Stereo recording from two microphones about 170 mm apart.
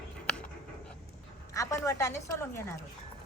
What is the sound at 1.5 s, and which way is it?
A woman's voice, 20° left (ahead or behind).